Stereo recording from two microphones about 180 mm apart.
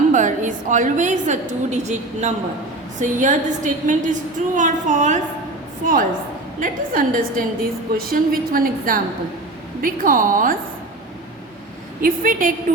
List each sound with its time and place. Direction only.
0.1 s a woman's voice: 45° right (ahead or behind)
12.0 s a woman's voice: 50° right (ahead or behind)